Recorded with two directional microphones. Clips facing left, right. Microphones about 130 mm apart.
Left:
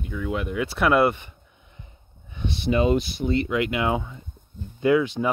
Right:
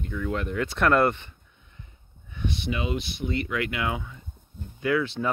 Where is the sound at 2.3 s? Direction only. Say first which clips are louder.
Left 7 dB; 30° left (ahead or behind).